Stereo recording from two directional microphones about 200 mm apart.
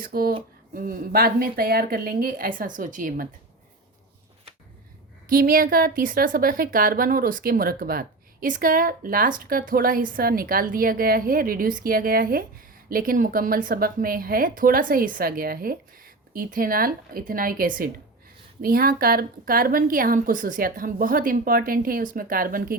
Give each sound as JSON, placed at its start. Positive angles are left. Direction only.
{"t": 0.0, "sound": "a woman's voice", "side_deg": -50}
{"t": 5.3, "sound": "a woman's voice", "side_deg": -45}